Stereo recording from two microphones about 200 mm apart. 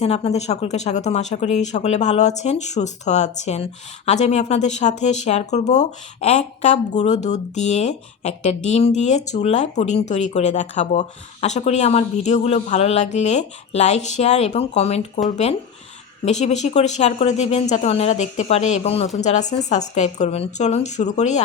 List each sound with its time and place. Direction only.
0.0 s speech: 30° left (ahead or behind)
16.2 s speech: 35° left (ahead or behind)